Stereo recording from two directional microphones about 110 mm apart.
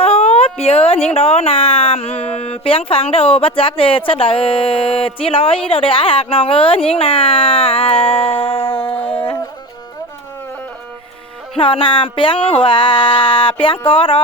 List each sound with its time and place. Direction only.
0.0 s baby cry: 70° left (ahead or behind)
0.6 s speech: 65° left (ahead or behind)
11.5 s a sound: 55° left (ahead or behind)